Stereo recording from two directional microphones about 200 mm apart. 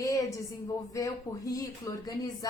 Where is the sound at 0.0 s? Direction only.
15° left (ahead or behind).